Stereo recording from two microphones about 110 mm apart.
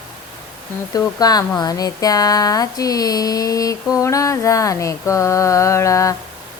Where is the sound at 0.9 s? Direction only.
35° left (ahead or behind).